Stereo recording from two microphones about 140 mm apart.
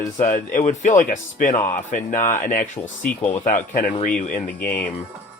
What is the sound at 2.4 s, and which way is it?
Speech, 80° left.